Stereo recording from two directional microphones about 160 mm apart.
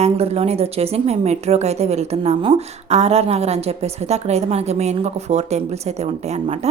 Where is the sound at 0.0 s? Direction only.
40° right (ahead or behind).